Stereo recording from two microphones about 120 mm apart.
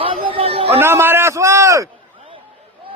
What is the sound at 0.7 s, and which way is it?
A man's voice, 20° right (ahead or behind).